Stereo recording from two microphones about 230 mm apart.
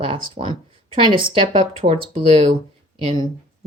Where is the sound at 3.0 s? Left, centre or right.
Right.